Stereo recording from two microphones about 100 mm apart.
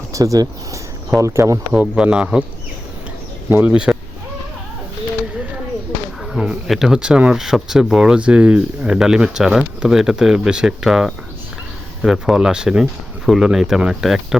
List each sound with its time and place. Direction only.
0.1 s speech: 35° right (ahead or behind)
1.7 s speech: 15° right (ahead or behind)
3.5 s speech: 15° right (ahead or behind)
6.3 s speech: 5° right (ahead or behind)